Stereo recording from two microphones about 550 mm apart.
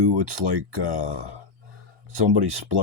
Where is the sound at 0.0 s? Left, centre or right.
Right.